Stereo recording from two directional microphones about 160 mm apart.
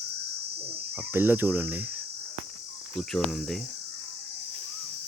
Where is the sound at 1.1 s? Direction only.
15° right (ahead or behind).